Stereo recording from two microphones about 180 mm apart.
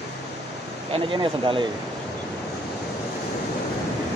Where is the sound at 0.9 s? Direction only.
30° right (ahead or behind).